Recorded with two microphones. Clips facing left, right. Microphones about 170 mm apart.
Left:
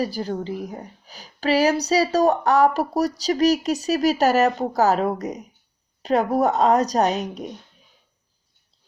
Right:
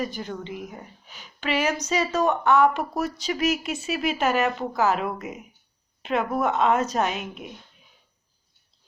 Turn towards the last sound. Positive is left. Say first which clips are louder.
# left 6 dB
turn(degrees=40)  # may be behind; listen again after turning